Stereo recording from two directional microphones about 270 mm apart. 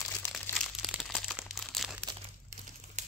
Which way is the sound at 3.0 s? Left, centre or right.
Right.